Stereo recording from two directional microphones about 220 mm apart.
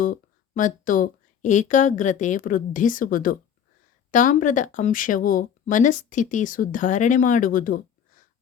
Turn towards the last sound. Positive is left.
turn(degrees=40)  # may be behind; listen again after turning